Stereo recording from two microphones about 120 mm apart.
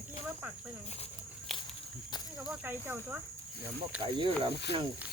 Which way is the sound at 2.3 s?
15° right (ahead or behind).